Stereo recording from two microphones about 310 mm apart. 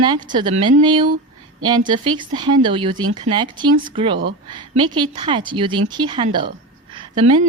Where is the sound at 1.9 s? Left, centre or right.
Centre.